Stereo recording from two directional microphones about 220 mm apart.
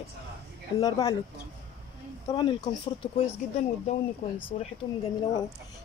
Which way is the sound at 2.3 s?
20° left (ahead or behind).